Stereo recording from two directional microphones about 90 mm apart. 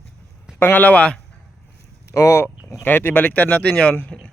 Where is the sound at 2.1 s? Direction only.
35° left (ahead or behind).